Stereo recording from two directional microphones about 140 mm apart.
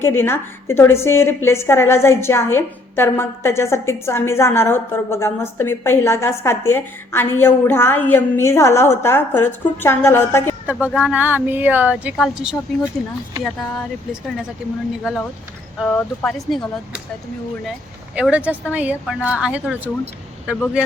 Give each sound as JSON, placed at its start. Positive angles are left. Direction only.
{"t": 0.0, "sound": "a woman's voice", "side_deg": 15}
{"t": 10.7, "sound": "a woman's voice", "side_deg": -10}
{"t": 15.8, "sound": "speech", "side_deg": 5}
{"t": 17.7, "sound": "a woman's voice", "side_deg": -10}